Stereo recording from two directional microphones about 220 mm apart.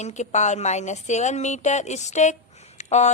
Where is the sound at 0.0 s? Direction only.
30° left (ahead or behind).